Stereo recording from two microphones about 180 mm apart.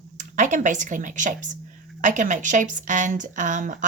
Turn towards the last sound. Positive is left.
turn(degrees=-45)  # may be behind; listen again after turning